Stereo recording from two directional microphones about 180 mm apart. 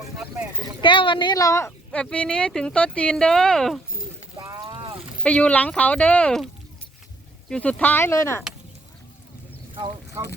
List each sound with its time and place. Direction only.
0.8 s speech: 25° left (ahead or behind); by 3.8 s centre (ahead or behind)
4.4 s a sound: 20° right (ahead or behind)
5.2 s speech: 5° left (ahead or behind)
7.5 s speech: 5° left (ahead or behind)